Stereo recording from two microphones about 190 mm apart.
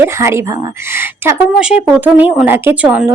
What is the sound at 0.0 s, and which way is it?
Speech, 15° right (ahead or behind).